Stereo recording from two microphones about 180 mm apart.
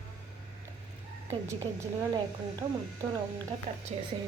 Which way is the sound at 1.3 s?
15° right (ahead or behind).